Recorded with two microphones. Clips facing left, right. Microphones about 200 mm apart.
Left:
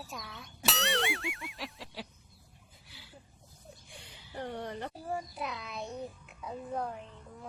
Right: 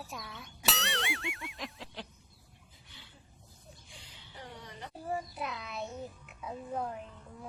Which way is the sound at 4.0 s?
55° left (ahead or behind).